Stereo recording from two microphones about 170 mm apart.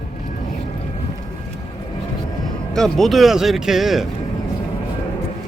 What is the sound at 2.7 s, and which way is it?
Speech, centre (ahead or behind).